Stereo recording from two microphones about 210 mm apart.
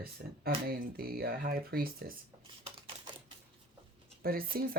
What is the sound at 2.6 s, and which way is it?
Typewriter, 25° right (ahead or behind).